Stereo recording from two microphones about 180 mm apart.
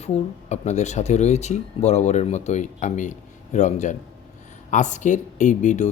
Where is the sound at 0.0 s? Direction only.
40° left (ahead or behind).